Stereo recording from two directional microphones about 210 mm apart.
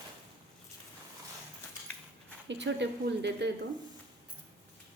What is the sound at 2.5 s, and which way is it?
A woman's voice, 55° right (ahead or behind).